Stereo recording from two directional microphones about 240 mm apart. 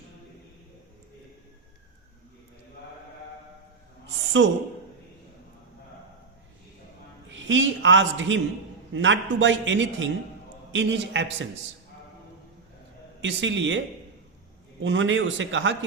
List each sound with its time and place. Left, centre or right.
4.4 s a man's voice: right
7.3 s a man's voice: right
13.2 s a man's voice: right